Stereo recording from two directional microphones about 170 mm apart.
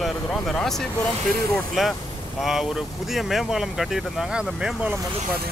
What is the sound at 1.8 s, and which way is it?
Speech, centre (ahead or behind).